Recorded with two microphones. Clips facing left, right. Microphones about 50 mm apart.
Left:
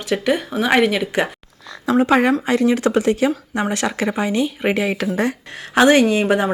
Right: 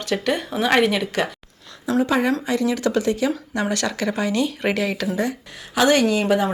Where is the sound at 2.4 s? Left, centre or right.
Left.